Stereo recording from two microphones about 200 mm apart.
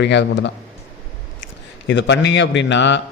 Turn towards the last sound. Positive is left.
turn(degrees=65)  # may be behind; listen again after turning